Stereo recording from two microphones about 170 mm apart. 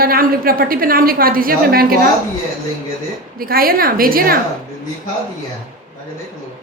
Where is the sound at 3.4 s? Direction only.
60° right (ahead or behind).